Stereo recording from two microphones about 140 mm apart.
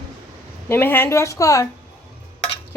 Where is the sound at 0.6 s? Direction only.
15° left (ahead or behind).